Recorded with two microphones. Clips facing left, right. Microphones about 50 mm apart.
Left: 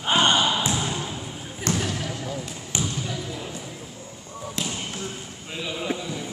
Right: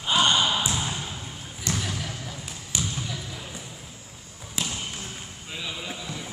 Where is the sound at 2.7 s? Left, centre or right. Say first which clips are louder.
Left 3 dB; left.